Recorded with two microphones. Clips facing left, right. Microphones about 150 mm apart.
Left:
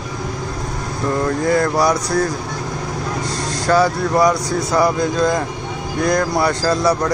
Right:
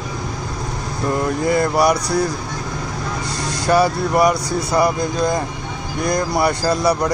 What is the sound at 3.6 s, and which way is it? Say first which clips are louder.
Speech: even; 15° right (ahead or behind).